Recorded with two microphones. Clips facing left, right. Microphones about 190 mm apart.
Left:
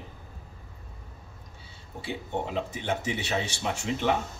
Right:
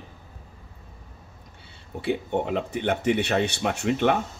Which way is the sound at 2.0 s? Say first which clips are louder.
Right 7 dB; 60° right (ahead or behind).